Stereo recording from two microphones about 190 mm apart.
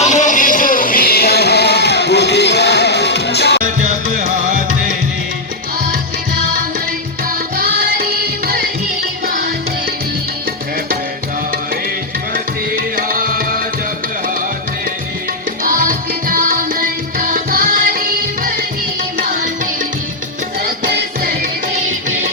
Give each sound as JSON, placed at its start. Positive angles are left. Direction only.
{"t": 0.0, "sound": "music", "side_deg": 40}
{"t": 3.6, "sound": "music", "side_deg": -40}
{"t": 7.5, "sound": "music", "side_deg": -50}
{"t": 12.3, "sound": "music", "side_deg": -50}
{"t": 15.6, "sound": "music", "side_deg": -45}
{"t": 20.9, "sound": "music", "side_deg": -55}